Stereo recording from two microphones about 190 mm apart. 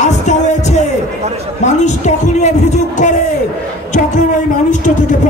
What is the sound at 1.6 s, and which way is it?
A man's voice, 40° left (ahead or behind).